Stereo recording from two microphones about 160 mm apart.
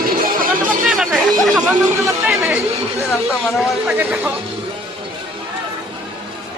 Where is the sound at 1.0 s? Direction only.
Centre (ahead or behind).